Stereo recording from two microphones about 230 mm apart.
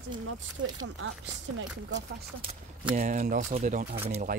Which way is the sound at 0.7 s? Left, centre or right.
Right.